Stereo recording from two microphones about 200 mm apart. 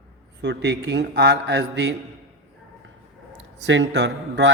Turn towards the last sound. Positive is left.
turn(degrees=-60)  # may be behind; listen again after turning